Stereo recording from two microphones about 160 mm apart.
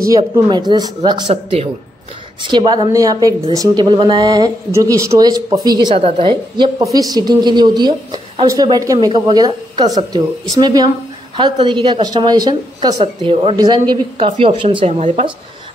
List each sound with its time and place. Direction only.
0.0 s a woman's voice: 20° right (ahead or behind)
1.3 s speech: 40° right (ahead or behind)
2.4 s a woman's voice: 30° right (ahead or behind)